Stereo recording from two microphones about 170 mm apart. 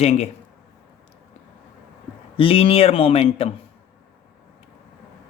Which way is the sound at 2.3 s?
35° left (ahead or behind).